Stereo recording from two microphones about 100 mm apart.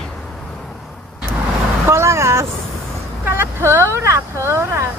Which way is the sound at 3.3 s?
25° right (ahead or behind).